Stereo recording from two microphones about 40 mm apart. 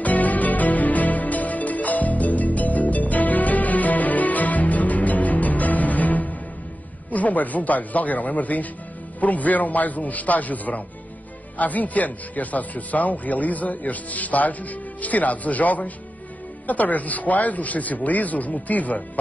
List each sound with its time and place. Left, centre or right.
0.0 s music: left
7.1 s speech: left